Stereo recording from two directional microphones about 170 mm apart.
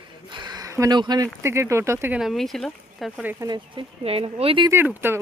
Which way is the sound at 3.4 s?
30° right (ahead or behind).